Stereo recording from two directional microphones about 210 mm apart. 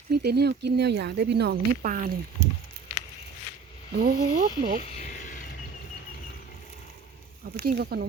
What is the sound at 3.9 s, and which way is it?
Speech, 45° right (ahead or behind).